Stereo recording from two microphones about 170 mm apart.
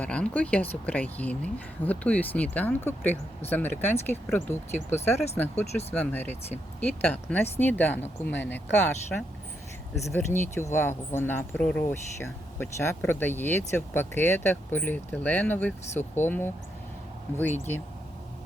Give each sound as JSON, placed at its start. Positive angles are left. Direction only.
{"t": 0.0, "sound": "speech", "side_deg": 5}
{"t": 5.1, "sound": "speech", "side_deg": 40}
{"t": 5.4, "sound": "speech", "side_deg": 10}